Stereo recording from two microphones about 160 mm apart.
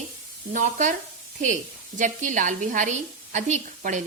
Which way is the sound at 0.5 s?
50° right (ahead or behind).